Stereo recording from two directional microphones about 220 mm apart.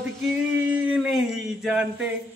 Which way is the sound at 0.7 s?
5° right (ahead or behind).